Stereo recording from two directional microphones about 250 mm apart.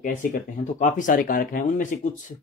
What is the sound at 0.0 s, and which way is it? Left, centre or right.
Speech, left.